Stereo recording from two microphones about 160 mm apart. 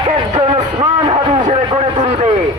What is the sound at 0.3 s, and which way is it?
Music, 35° right (ahead or behind).